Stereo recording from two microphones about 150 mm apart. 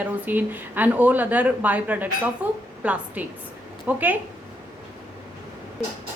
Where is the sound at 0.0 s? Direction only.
10° right (ahead or behind).